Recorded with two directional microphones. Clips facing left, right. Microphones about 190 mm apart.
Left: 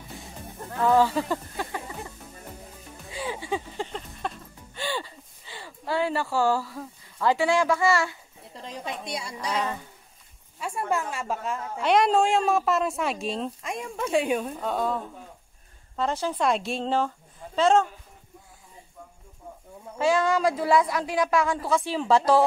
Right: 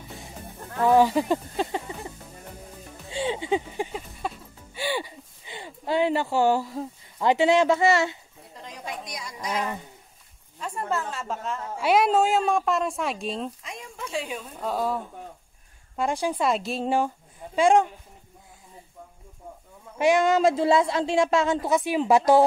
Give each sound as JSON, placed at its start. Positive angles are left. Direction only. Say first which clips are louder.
{"t": 0.8, "sound": "a sound", "louder": "right 2 dB", "side_deg": -15}
{"t": 8.6, "sound": "a sound", "louder": "left 2 dB", "side_deg": 25}
{"t": 10.6, "sound": "speech", "louder": "left 1 dB", "side_deg": 10}
{"t": 11.8, "sound": "a woman's voice", "louder": "even", "side_deg": -5}
{"t": 13.6, "sound": "speech", "louder": "left 7 dB", "side_deg": 55}
{"t": 14.6, "sound": "a woman's voice", "louder": "even", "side_deg": -5}
{"t": 16.0, "sound": "speech", "louder": "right 1 dB", "side_deg": -10}
{"t": 20.0, "sound": "a woman's voice", "louder": "right 3 dB", "side_deg": -20}